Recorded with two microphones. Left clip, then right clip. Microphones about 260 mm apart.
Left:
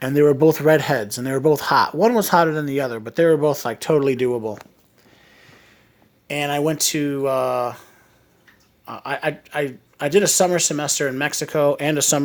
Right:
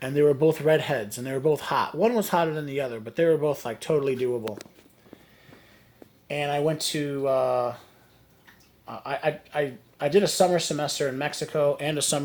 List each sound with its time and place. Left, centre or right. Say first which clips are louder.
0.0 s speech: left 6 dB; left
6.2 s speech: left 4 dB; left
8.9 s speech: left 3 dB; left